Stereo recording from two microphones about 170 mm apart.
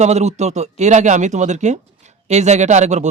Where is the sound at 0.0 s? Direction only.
40° right (ahead or behind).